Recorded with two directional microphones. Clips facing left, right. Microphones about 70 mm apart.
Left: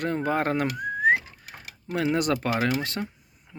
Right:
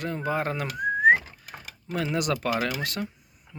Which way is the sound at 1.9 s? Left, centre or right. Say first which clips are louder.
Left 3 dB; left.